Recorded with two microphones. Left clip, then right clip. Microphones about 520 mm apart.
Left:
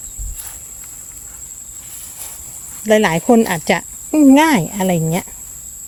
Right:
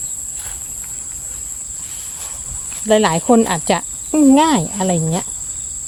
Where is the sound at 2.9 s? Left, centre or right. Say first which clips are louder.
Left 1 dB; left.